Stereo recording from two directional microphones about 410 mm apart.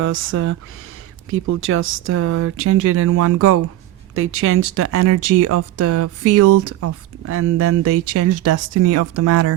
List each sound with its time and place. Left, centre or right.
0.0 s speech: right